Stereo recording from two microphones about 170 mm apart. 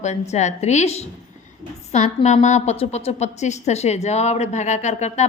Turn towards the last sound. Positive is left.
turn(degrees=45)  # may be behind; listen again after turning